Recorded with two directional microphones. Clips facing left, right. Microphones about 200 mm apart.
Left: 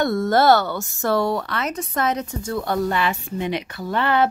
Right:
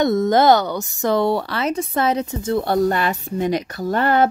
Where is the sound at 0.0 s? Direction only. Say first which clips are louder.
Right 3 dB; 20° right (ahead or behind).